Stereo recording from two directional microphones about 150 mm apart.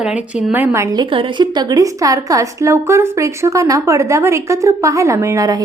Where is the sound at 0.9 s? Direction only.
35° right (ahead or behind).